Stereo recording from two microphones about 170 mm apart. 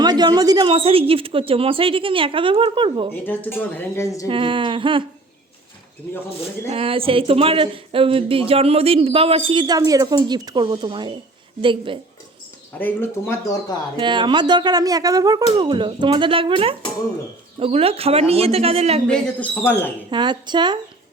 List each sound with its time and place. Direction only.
0.0 s a woman's voice: 25° right (ahead or behind)
3.2 s speech: 10° left (ahead or behind)
4.3 s speech: 30° right (ahead or behind)
6.7 s a woman's voice: 35° right (ahead or behind)
12.8 s speech: 15° left (ahead or behind)
13.9 s a woman's voice: 25° right (ahead or behind)
19.0 s speech: 5° left (ahead or behind)
20.1 s speech: 25° right (ahead or behind)